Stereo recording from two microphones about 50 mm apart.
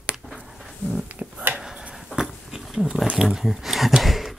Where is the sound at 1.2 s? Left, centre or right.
Right.